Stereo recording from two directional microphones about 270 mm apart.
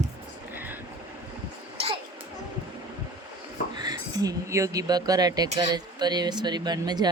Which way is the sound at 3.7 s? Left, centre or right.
Centre.